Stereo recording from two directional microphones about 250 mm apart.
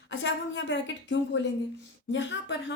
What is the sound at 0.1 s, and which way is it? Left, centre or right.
A woman's voice, left.